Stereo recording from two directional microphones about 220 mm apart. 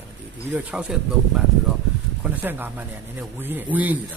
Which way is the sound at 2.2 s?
10° right (ahead or behind).